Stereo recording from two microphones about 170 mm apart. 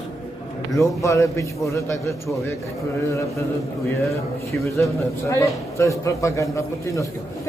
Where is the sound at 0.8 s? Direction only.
15° left (ahead or behind).